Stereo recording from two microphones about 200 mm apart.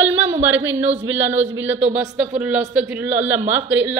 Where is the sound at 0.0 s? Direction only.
10° right (ahead or behind).